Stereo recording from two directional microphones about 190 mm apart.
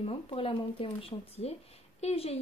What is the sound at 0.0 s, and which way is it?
A woman's voice, 30° left (ahead or behind).